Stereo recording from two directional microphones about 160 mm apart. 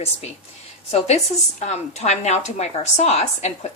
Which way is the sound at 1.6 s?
45° left (ahead or behind).